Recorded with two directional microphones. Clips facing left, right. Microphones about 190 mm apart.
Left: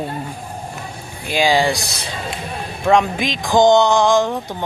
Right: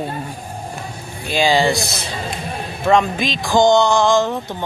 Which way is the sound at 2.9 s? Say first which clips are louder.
Even; 15° left (ahead or behind).